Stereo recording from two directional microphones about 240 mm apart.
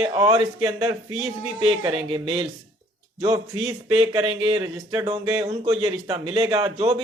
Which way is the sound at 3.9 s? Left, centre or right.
Right.